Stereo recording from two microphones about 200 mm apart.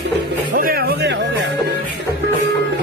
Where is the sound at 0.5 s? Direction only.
45° right (ahead or behind).